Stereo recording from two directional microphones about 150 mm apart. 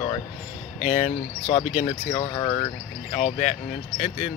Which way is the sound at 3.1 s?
45° left (ahead or behind).